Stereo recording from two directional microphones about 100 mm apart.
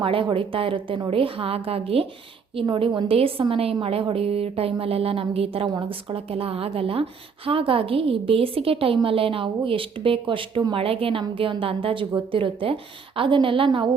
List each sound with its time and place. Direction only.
0.0 s a woman's voice: 60° right (ahead or behind)
2.7 s a woman's voice: 65° right (ahead or behind)
5.6 s a woman's voice: 55° right (ahead or behind)